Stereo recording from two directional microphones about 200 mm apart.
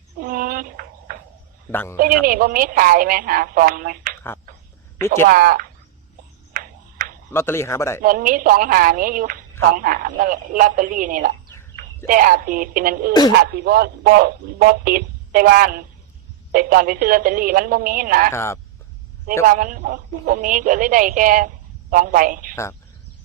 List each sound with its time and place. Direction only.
0.2 s a sound: 45° right (ahead or behind)
1.7 s speech: 10° left (ahead or behind)
2.0 s speech: 45° right (ahead or behind)
4.9 s speech: 15° left (ahead or behind)
5.2 s speech: 45° right (ahead or behind)
6.5 s ping: 45° right (ahead or behind)
7.3 s speech: 10° left (ahead or behind)
8.0 s speech: 45° right (ahead or behind)
18.3 s speech: 15° left (ahead or behind)
19.5 s speech: 40° right (ahead or behind)